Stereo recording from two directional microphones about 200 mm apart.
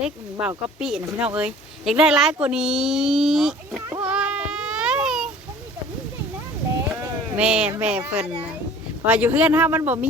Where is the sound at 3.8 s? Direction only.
10° right (ahead or behind).